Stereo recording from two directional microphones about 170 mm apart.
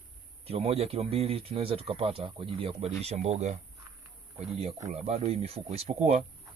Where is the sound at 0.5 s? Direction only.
35° right (ahead or behind).